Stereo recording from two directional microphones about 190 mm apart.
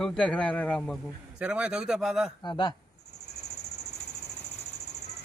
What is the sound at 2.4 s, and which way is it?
Speech, 25° left (ahead or behind).